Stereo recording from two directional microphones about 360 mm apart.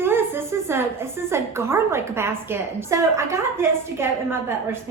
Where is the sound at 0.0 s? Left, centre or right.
Centre.